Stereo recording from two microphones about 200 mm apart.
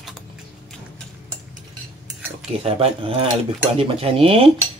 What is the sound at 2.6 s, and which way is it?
Speech, 30° right (ahead or behind).